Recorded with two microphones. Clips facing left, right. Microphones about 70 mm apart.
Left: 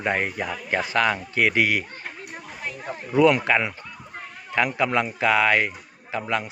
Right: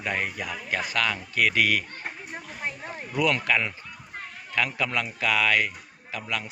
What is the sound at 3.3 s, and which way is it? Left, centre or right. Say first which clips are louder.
Speech: left 4 dB; left.